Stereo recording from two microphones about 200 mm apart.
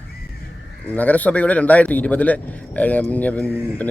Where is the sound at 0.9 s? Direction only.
10° left (ahead or behind).